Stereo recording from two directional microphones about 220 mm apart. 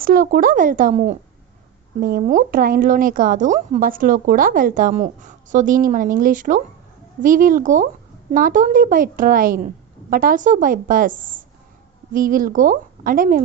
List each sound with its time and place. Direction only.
0.0 s speech: 40° right (ahead or behind)